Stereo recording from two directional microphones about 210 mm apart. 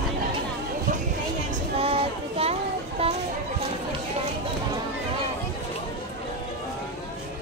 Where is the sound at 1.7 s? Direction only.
25° right (ahead or behind).